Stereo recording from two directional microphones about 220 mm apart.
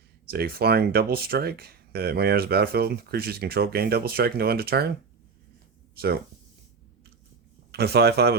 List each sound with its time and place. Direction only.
0.3 s speech: 45° right (ahead or behind)
5.9 s speech: 45° right (ahead or behind)
7.7 s speech: 50° right (ahead or behind)